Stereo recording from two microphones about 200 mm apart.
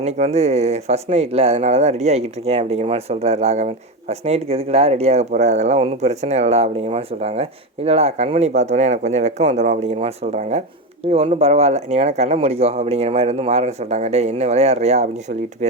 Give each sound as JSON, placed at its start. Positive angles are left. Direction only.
{"t": 0.0, "sound": "speech", "side_deg": -35}